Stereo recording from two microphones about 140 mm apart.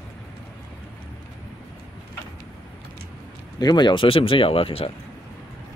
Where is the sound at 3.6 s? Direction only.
30° left (ahead or behind).